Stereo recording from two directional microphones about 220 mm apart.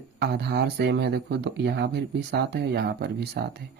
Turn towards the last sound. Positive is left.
turn(degrees=-45)  # may be behind; listen again after turning